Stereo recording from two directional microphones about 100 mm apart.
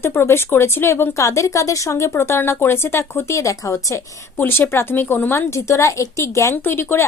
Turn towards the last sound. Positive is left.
turn(degrees=25)  # may be behind; listen again after turning